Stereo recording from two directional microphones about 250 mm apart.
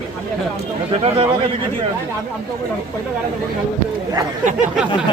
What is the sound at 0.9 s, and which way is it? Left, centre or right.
Speech, right.